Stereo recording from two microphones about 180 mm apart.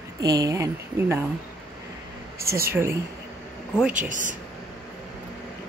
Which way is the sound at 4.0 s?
45° right (ahead or behind).